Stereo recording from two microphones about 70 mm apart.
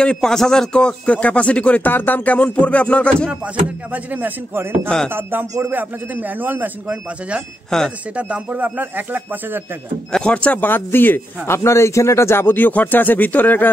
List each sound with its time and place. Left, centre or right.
0.0 s speech: centre
3.9 s a man's voice: right
4.8 s speech: centre
5.1 s a man's voice: right
7.7 s speech: centre
8.2 s a man's voice: right
10.1 s speech: centre
10.7 s a man's voice: left